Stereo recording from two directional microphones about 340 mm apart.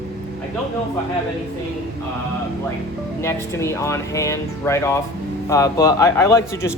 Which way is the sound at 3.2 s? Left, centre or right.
Centre.